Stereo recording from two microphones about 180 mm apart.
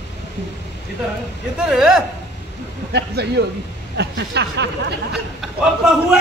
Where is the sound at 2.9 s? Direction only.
65° right (ahead or behind).